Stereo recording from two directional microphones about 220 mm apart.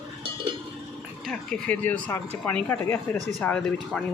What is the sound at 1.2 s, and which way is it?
Speech, 5° left (ahead or behind).